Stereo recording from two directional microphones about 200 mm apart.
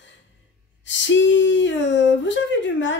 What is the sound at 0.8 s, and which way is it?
Speech, 65° left (ahead or behind).